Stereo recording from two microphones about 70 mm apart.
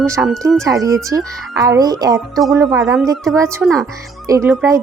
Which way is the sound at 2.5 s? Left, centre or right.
Right.